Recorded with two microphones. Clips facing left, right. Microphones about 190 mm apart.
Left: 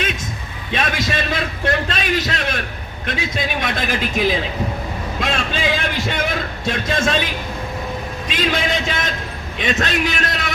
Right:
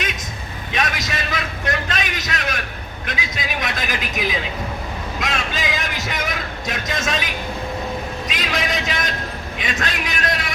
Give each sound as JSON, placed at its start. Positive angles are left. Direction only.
{"t": 0.7, "sound": "a man's voice", "side_deg": 30}
{"t": 8.3, "sound": "a man's voice", "side_deg": 30}